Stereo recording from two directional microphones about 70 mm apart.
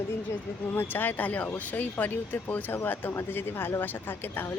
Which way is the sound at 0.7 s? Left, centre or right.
Left.